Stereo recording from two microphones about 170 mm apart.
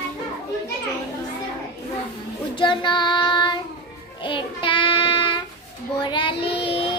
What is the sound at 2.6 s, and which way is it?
Child singing, 25° left (ahead or behind).